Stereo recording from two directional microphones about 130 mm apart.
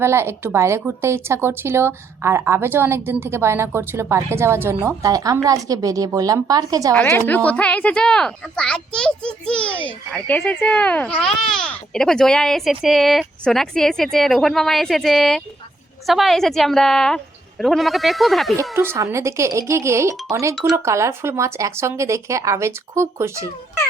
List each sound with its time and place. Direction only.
0.0 s a woman's voice: 20° right (ahead or behind)
6.9 s a child's voice: 10° left (ahead or behind)
18.7 s a woman's voice: 20° right (ahead or behind)